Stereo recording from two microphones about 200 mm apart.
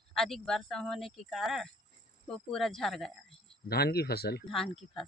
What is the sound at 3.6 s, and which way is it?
Speech, 50° left (ahead or behind).